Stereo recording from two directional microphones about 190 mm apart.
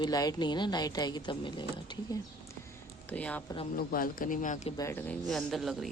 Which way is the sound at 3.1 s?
5° left (ahead or behind).